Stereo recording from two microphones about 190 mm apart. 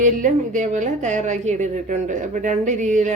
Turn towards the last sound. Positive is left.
turn(degrees=-40)  # may be behind; listen again after turning